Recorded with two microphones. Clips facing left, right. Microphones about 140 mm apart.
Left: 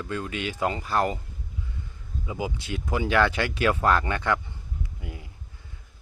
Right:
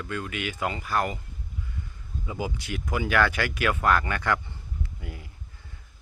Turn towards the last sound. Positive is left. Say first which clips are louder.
# even
turn(degrees=20)  # may be behind; listen again after turning